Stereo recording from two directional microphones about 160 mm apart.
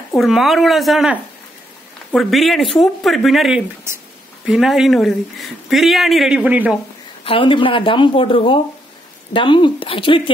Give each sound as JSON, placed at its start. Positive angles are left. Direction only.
{"t": 0.1, "sound": "speech", "side_deg": 0}
{"t": 7.2, "sound": "speech", "side_deg": 30}